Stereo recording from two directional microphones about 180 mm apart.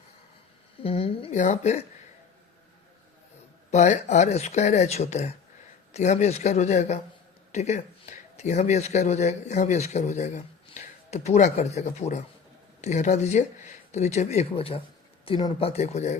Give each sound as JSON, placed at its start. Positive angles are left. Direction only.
{"t": 0.8, "sound": "a woman's voice", "side_deg": 30}
{"t": 3.7, "sound": "speech", "side_deg": 40}